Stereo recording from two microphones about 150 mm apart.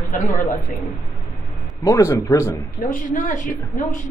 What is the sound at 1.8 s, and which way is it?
Speech, 20° left (ahead or behind).